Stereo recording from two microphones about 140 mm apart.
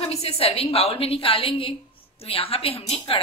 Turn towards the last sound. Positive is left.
turn(degrees=45)  # may be behind; listen again after turning